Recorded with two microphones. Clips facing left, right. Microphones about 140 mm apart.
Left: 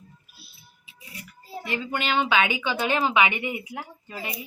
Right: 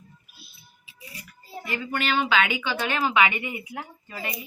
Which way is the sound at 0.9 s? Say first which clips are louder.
Left 1 dB; 25° left (ahead or behind).